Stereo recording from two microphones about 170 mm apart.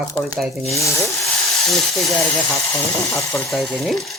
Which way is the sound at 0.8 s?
15° left (ahead or behind).